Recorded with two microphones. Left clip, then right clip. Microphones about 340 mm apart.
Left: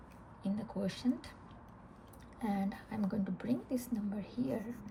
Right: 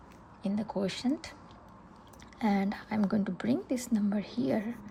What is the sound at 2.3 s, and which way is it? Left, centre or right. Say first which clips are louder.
A woman's voice: right 8 dB; right.